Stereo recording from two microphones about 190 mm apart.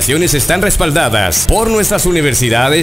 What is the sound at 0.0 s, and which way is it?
Speech, centre (ahead or behind).